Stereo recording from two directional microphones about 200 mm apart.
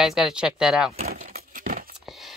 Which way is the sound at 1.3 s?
35° right (ahead or behind).